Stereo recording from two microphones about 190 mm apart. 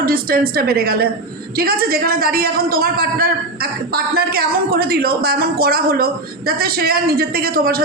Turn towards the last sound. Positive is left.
turn(degrees=-50)  # may be behind; listen again after turning